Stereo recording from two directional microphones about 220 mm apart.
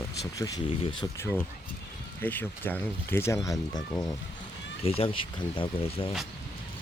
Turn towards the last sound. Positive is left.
turn(degrees=25)  # may be behind; listen again after turning